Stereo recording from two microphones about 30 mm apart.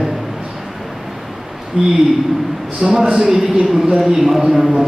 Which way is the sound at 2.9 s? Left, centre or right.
Right.